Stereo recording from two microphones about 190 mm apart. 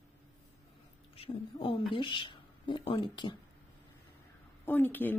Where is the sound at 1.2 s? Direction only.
25° left (ahead or behind).